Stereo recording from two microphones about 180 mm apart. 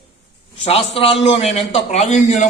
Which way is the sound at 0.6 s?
35° left (ahead or behind).